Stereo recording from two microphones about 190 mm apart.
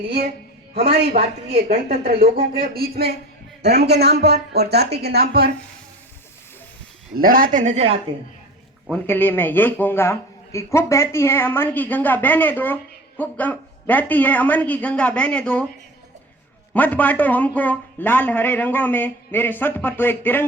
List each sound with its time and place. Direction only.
0.8 s speech: 55° right (ahead or behind)
7.2 s speech: 50° right (ahead or behind)
8.9 s a man's voice: 10° left (ahead or behind)
16.7 s a man's voice: 10° left (ahead or behind)